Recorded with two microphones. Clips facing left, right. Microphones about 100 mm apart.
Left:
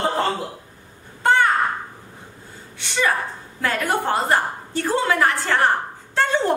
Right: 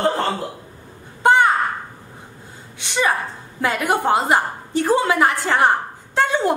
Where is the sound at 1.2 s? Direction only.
15° right (ahead or behind).